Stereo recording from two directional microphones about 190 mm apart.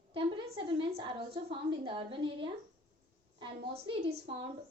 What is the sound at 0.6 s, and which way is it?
A woman's voice, 25° right (ahead or behind).